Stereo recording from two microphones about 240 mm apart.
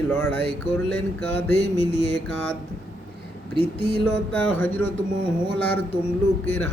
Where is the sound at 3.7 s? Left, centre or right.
Right.